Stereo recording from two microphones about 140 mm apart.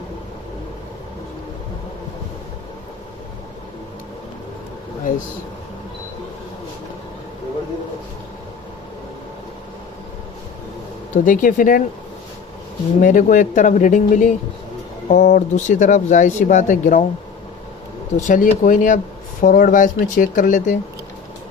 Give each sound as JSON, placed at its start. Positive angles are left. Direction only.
{"t": 11.1, "sound": "speech", "side_deg": 75}
{"t": 13.0, "sound": "speech", "side_deg": 70}
{"t": 18.2, "sound": "speech", "side_deg": 70}